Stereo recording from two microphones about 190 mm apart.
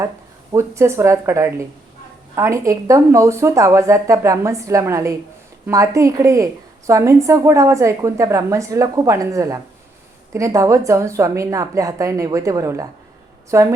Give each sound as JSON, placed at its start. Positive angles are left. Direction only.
{"t": 0.5, "sound": "a woman's voice", "side_deg": -15}